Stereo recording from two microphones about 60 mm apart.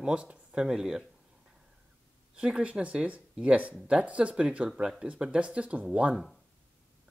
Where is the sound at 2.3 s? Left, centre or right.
Centre.